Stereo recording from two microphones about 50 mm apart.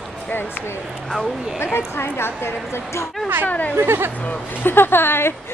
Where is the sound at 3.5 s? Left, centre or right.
Left.